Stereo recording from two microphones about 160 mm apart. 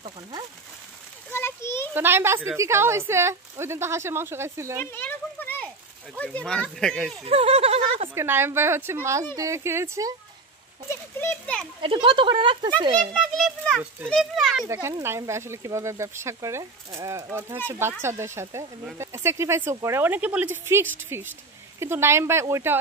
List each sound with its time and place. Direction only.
1.3 s a child's voice: 15° left (ahead or behind)
2.0 s speech: 15° right (ahead or behind)
4.9 s children playing: 10° left (ahead or behind)
6.1 s speech: 10° left (ahead or behind)
7.2 s speech: 40° right (ahead or behind)
8.1 s speech: 15° right (ahead or behind)
10.9 s a child's voice: 15° left (ahead or behind)
11.8 s speech: 35° right (ahead or behind)
13.1 s a child's voice: centre (ahead or behind)
14.7 s speech: 15° right (ahead or behind)